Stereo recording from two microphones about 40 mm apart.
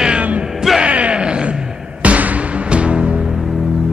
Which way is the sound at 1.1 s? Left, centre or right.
Right.